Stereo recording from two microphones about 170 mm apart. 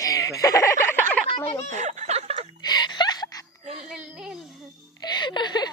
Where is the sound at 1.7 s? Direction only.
45° right (ahead or behind).